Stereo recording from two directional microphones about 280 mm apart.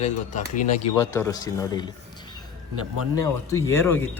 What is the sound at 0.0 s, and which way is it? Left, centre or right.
Speech, left.